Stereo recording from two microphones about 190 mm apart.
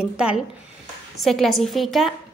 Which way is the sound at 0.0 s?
5° right (ahead or behind).